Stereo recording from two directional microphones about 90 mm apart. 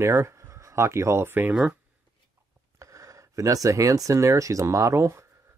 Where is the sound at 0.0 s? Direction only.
30° right (ahead or behind).